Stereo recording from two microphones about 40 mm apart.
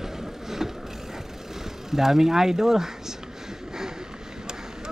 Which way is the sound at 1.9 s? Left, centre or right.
Centre.